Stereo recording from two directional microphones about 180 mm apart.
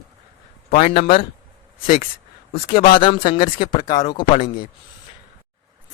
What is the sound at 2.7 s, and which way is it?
Speech, 55° left (ahead or behind).